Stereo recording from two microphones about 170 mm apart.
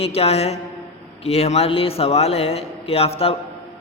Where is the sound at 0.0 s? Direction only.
35° left (ahead or behind).